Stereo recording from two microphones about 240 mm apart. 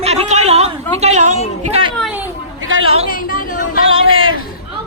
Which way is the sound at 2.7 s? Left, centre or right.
Right.